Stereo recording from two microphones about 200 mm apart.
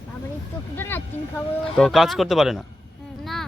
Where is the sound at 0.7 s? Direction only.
10° left (ahead or behind).